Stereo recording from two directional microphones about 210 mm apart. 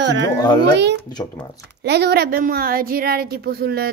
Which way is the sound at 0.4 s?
20° left (ahead or behind).